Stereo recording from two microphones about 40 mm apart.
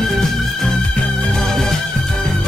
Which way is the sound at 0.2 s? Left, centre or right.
Centre.